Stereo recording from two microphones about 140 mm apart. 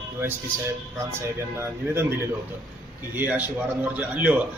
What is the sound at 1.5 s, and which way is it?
Speech, 20° right (ahead or behind).